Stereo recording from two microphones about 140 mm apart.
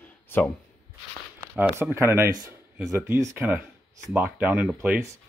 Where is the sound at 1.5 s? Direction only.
10° right (ahead or behind).